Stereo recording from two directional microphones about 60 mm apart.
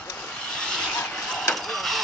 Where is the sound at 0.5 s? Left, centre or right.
Centre.